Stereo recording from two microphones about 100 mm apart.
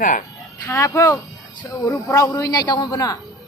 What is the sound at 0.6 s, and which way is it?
A woman's voice, 25° left (ahead or behind).